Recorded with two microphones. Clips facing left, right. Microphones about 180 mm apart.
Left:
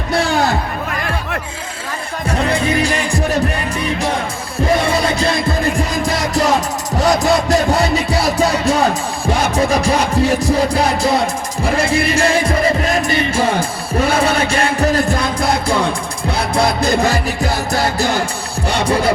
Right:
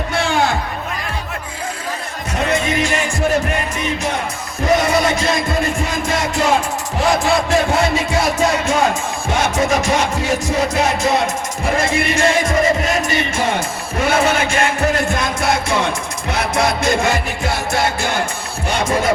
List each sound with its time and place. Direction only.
0.1 s a sound: 40° left (ahead or behind)
2.5 s music: 35° left (ahead or behind)
7.0 s music: 40° left (ahead or behind)